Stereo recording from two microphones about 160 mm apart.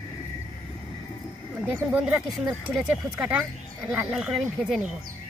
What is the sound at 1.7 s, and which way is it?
Speech, 10° right (ahead or behind).